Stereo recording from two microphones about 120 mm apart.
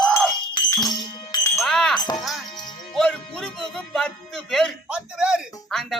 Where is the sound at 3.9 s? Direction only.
5° left (ahead or behind).